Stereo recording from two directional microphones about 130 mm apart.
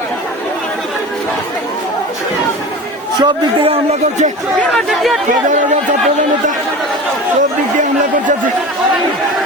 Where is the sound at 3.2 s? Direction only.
50° right (ahead or behind).